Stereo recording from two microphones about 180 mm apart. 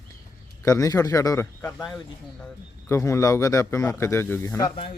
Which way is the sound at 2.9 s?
15° left (ahead or behind).